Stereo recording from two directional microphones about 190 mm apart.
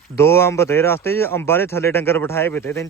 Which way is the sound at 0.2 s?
15° left (ahead or behind).